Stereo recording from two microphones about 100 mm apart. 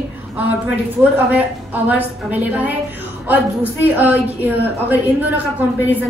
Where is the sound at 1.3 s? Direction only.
15° right (ahead or behind).